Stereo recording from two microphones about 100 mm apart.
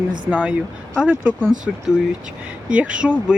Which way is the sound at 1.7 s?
Centre (ahead or behind).